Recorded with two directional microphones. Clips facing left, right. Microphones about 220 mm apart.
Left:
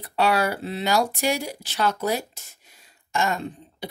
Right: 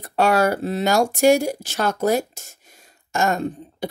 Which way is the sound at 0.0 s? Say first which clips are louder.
Right 4 dB; 45° right (ahead or behind).